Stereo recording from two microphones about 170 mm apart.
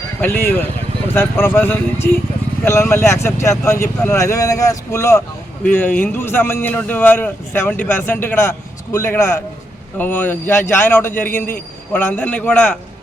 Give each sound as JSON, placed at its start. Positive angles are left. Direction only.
{"t": 0.2, "sound": "speech", "side_deg": 15}